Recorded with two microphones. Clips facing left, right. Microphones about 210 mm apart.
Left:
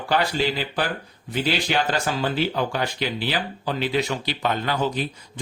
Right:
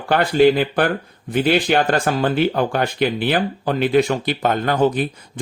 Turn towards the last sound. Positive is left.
turn(degrees=-55)  # may be behind; listen again after turning